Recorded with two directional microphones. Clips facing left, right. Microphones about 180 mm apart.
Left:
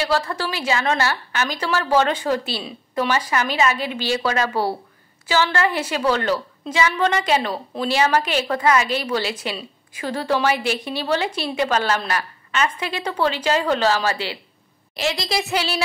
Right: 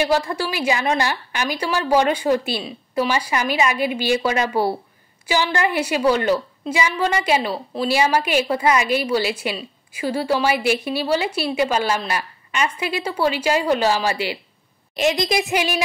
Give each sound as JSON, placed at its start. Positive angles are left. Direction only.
{"t": 0.0, "sound": "a woman's voice", "side_deg": -15}